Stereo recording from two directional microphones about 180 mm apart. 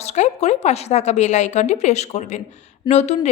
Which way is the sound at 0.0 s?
40° left (ahead or behind).